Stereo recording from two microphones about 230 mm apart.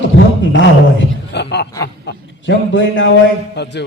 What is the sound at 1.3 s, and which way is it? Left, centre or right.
A man's voice, left.